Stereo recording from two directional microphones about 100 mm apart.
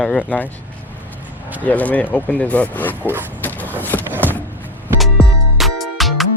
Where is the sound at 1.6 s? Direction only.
15° left (ahead or behind).